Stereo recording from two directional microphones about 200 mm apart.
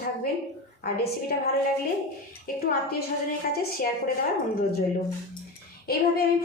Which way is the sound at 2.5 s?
45° left (ahead or behind).